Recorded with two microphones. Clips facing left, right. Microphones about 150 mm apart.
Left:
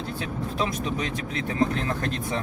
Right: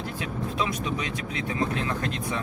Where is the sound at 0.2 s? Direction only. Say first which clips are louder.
Left 1 dB; 35° left (ahead or behind).